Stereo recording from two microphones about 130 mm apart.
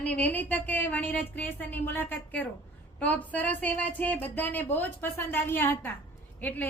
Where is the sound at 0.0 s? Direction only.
10° left (ahead or behind).